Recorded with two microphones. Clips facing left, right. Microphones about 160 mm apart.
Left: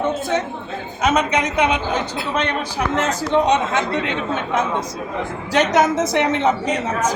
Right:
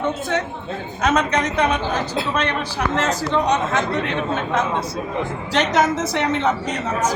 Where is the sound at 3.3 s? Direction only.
25° left (ahead or behind).